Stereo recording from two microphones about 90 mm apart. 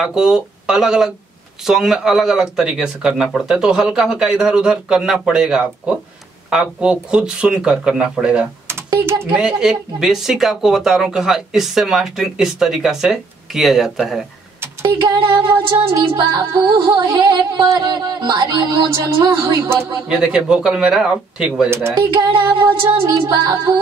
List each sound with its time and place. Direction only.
0.0 s speech: 10° right (ahead or behind)
9.0 s speech: 30° right (ahead or behind)
9.3 s speech: 5° right (ahead or behind)
15.0 s music: 60° right (ahead or behind)
16.2 s music: 50° right (ahead or behind)
20.1 s speech: 10° right (ahead or behind)
23.0 s music: 40° right (ahead or behind)